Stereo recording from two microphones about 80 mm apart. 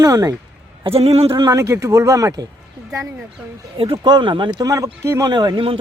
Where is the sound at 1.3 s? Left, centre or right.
Right.